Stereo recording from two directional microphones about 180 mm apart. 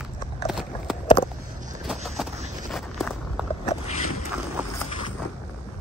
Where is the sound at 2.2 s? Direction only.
Centre (ahead or behind).